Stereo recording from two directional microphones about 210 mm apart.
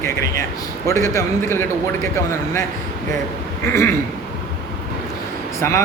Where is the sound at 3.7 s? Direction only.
10° left (ahead or behind).